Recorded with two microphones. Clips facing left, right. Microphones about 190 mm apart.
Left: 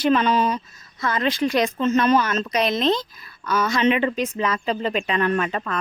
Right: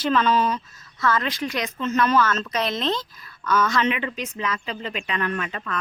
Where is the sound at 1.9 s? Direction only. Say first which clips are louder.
Even; 20° left (ahead or behind).